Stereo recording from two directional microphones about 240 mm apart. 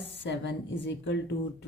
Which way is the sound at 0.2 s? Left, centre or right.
Left.